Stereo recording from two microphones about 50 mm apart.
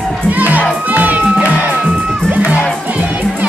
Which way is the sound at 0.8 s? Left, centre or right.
Right.